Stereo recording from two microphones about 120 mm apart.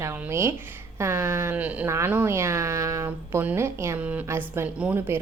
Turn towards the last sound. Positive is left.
turn(degrees=-20)  # may be behind; listen again after turning